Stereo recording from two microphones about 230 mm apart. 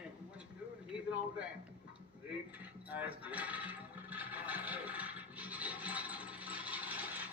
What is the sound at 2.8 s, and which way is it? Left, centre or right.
Television, centre.